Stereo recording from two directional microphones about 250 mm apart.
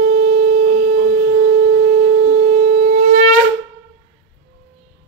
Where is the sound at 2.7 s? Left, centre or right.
Right.